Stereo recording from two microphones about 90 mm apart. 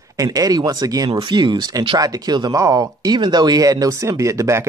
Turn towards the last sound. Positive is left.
turn(degrees=-35)  # may be behind; listen again after turning